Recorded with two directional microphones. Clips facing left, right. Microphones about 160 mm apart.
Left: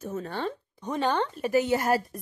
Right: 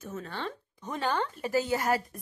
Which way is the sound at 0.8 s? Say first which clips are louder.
Left 4 dB; 20° left (ahead or behind).